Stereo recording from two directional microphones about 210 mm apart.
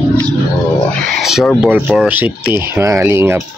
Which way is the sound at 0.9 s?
Centre (ahead or behind).